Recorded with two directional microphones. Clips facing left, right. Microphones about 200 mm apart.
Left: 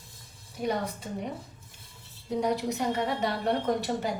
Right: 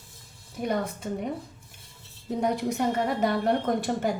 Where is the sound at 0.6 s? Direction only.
55° right (ahead or behind).